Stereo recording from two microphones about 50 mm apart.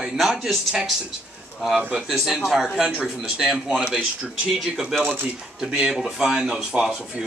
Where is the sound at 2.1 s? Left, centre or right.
Centre.